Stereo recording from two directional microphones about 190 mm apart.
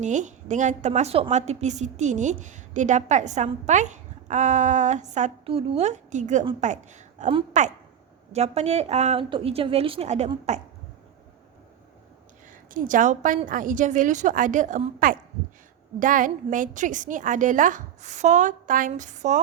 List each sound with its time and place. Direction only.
0.0 s a woman's voice: 40° right (ahead or behind)
6.4 s a woman's voice: 25° right (ahead or behind)
6.7 s a woman's voice: 40° right (ahead or behind)
12.7 s a woman's voice: 45° right (ahead or behind)